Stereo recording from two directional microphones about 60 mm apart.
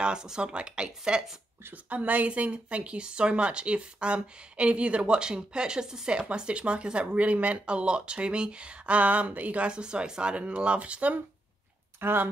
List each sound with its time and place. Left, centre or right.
0.0 s speech: centre
12.0 s speech: right